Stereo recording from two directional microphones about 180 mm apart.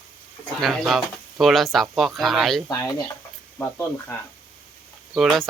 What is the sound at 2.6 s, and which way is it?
Speech, 20° left (ahead or behind).